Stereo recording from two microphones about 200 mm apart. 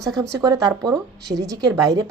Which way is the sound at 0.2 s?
15° right (ahead or behind).